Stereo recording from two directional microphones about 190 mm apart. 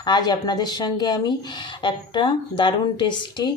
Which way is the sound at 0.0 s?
20° left (ahead or behind).